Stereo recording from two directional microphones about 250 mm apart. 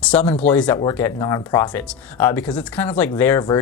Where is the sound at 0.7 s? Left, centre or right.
Centre.